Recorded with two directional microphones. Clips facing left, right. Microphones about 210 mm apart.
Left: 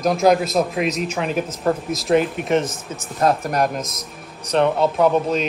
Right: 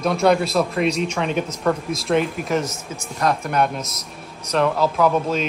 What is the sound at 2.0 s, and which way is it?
Speech, centre (ahead or behind).